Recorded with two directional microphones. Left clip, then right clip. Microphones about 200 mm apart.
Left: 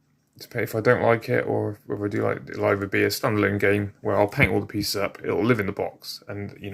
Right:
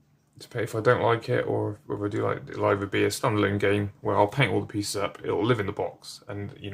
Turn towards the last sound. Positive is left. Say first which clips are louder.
# left 2 dB
turn(degrees=10)  # may be behind; listen again after turning